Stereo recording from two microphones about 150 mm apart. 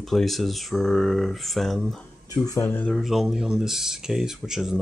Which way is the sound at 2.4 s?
20° left (ahead or behind).